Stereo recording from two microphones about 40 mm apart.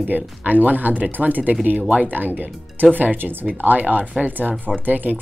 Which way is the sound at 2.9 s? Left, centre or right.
Right.